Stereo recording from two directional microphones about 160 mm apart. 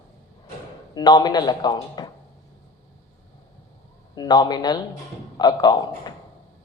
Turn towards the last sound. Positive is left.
turn(degrees=25)  # may be behind; listen again after turning